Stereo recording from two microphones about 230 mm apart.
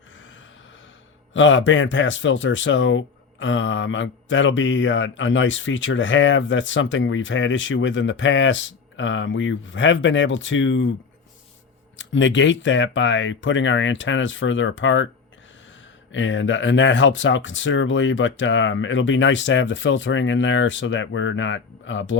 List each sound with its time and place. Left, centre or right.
1.3 s speech: left
11.9 s speech: left
16.1 s speech: left